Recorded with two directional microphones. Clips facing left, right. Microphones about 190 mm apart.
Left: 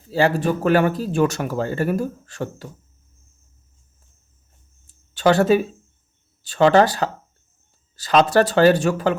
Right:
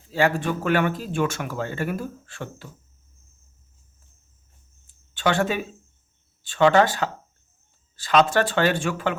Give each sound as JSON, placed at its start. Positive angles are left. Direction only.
{"t": 0.1, "sound": "speech", "side_deg": 35}
{"t": 4.9, "sound": "a sound", "side_deg": 40}
{"t": 6.4, "sound": "speech", "side_deg": 40}